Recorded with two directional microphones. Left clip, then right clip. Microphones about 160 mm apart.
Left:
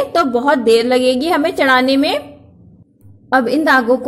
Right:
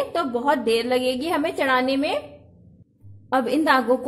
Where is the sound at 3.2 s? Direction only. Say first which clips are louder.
Left 7 dB; 10° left (ahead or behind).